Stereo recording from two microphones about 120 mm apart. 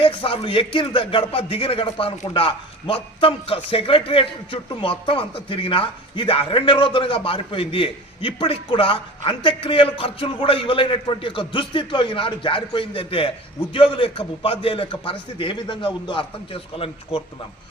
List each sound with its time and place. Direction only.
0.0 s speech: 45° left (ahead or behind)